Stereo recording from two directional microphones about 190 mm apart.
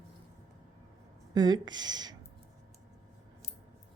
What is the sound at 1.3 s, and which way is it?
Speech, 20° right (ahead or behind).